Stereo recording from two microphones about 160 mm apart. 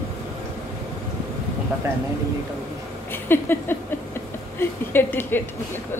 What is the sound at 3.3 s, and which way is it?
A woman's voice, 15° left (ahead or behind).